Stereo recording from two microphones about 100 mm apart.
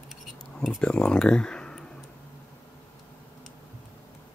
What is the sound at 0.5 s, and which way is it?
Speech, 5° left (ahead or behind).